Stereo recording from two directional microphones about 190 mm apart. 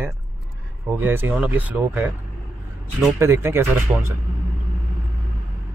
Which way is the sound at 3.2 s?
15° right (ahead or behind).